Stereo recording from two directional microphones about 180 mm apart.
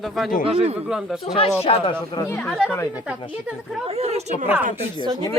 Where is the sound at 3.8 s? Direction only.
35° right (ahead or behind).